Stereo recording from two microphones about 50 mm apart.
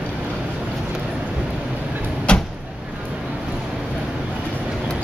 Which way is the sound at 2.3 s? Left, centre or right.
Left.